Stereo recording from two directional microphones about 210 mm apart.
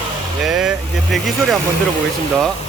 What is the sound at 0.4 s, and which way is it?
Vehicle, centre (ahead or behind).